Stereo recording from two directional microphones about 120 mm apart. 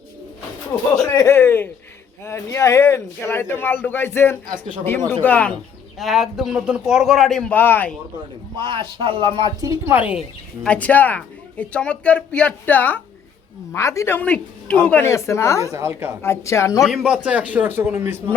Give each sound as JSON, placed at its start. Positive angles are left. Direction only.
{"t": 0.7, "sound": "speech", "side_deg": 25}
{"t": 6.0, "sound": "a man's voice", "side_deg": 0}
{"t": 7.5, "sound": "speech", "side_deg": 15}
{"t": 8.5, "sound": "speech", "side_deg": -45}
{"t": 9.6, "sound": "a woman's voice", "side_deg": -25}
{"t": 9.9, "sound": "speech", "side_deg": -10}
{"t": 10.6, "sound": "speech", "side_deg": 10}
{"t": 13.7, "sound": "speech", "side_deg": 25}
{"t": 15.0, "sound": "speech", "side_deg": 25}
{"t": 15.7, "sound": "a woman's voice", "side_deg": -20}
{"t": 16.2, "sound": "speech", "side_deg": 20}
{"t": 16.8, "sound": "a man's voice", "side_deg": -5}